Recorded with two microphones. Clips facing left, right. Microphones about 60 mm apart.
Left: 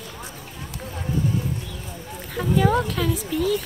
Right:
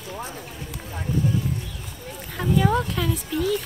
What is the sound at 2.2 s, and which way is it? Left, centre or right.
Speech, centre.